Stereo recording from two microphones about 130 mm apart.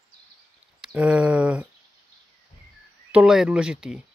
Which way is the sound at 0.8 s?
10° right (ahead or behind).